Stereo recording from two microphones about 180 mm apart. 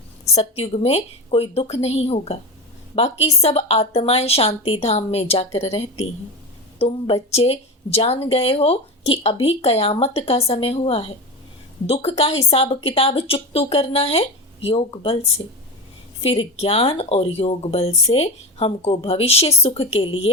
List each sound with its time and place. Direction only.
0.3 s a woman's voice: 35° left (ahead or behind)
16.2 s a woman's voice: 35° left (ahead or behind)